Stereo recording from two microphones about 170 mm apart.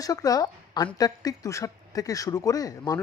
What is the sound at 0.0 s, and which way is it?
A woman's voice, 20° left (ahead or behind).